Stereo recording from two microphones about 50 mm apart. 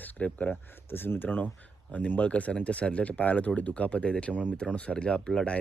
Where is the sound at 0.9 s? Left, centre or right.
Left.